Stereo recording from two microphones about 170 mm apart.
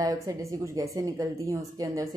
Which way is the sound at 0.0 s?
20° right (ahead or behind).